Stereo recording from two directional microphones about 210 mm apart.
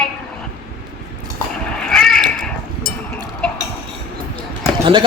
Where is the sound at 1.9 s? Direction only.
5° left (ahead or behind).